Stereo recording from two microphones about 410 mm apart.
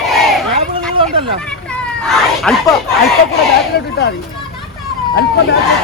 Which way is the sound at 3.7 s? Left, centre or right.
Left.